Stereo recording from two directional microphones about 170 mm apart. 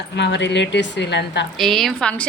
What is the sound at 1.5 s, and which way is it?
Speech, centre (ahead or behind).